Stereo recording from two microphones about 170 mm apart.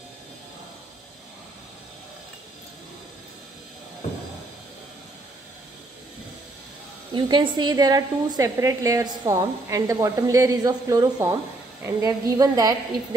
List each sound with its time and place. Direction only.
7.2 s a woman's voice: 25° right (ahead or behind)